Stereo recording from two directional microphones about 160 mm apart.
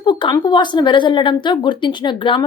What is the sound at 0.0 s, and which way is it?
A woman's voice, 30° left (ahead or behind).